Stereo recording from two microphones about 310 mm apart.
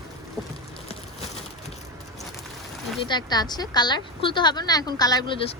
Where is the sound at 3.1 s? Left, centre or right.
Centre.